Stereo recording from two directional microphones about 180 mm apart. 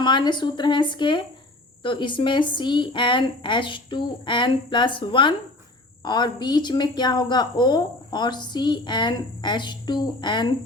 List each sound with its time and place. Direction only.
0.0 s speech: 25° left (ahead or behind)